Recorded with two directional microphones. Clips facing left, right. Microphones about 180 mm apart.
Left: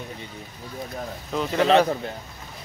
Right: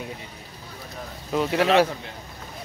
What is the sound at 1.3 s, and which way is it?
Speech, 5° right (ahead or behind).